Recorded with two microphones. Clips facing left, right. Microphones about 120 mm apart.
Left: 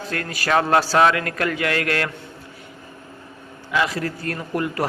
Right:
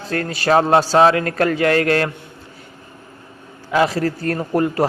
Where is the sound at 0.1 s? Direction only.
30° right (ahead or behind).